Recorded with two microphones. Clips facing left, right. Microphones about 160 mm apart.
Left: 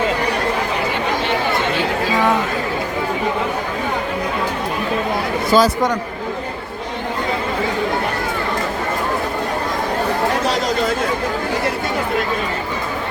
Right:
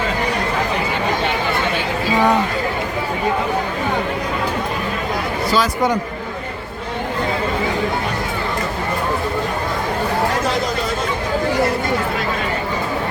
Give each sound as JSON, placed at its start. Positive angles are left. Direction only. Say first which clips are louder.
{"t": 5.5, "sound": "speech", "louder": "left 5 dB", "side_deg": 40}